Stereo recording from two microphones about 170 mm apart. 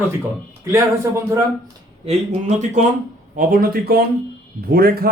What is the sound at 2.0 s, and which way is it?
Speech, 35° right (ahead or behind).